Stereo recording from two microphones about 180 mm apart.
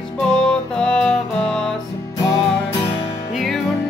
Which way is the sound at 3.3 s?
Centre (ahead or behind).